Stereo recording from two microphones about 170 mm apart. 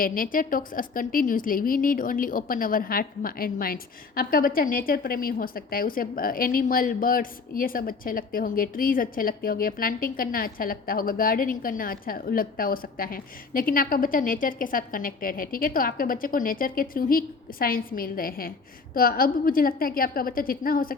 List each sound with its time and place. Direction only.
0.0 s a woman's voice: 55° left (ahead or behind)